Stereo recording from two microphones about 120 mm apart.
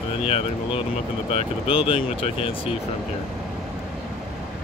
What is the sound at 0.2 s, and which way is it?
Speech, 50° left (ahead or behind).